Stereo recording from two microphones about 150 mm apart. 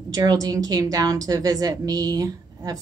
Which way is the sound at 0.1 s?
25° right (ahead or behind).